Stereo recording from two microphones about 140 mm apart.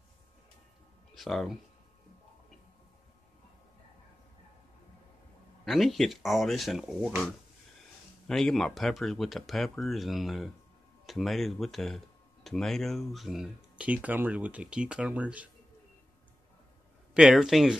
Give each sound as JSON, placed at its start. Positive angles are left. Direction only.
{"t": 1.1, "sound": "speech", "side_deg": 0}
{"t": 5.7, "sound": "speech", "side_deg": 0}
{"t": 8.3, "sound": "speech", "side_deg": 5}
{"t": 17.1, "sound": "speech", "side_deg": -5}